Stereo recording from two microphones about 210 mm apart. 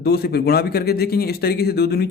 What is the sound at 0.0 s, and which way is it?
Speech, 50° left (ahead or behind).